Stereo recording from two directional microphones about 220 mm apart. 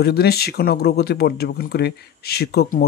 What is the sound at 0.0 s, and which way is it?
Speech, 45° left (ahead or behind).